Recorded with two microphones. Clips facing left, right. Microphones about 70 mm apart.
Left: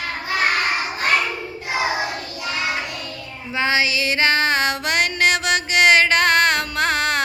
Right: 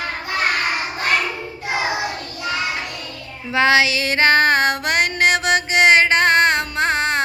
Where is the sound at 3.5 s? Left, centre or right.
Right.